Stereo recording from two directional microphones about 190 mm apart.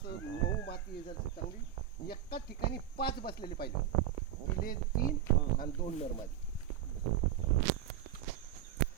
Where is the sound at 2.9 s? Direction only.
55° left (ahead or behind).